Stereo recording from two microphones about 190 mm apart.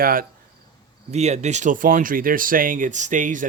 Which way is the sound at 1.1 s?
35° right (ahead or behind).